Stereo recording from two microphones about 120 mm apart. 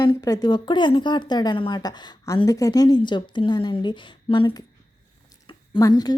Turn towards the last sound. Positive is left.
turn(degrees=35)  # may be behind; listen again after turning